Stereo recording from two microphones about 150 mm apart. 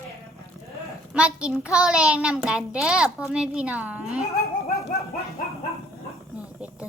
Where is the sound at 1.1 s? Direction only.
5° right (ahead or behind).